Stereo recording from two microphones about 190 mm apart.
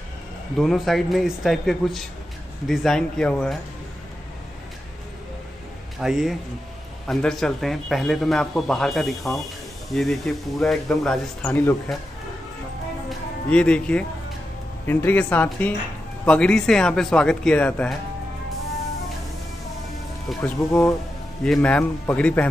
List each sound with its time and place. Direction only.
0.6 s a man's voice: centre (ahead or behind)
5.9 s a man's voice: centre (ahead or behind)
13.5 s a man's voice: 5° left (ahead or behind)
20.2 s speech: 5° left (ahead or behind)